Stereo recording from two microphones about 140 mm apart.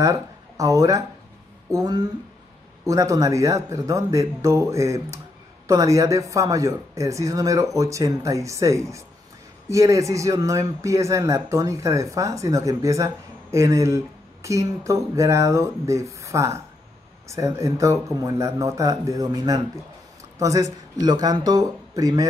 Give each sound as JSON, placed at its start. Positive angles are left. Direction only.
{"t": 0.0, "sound": "speech", "side_deg": -25}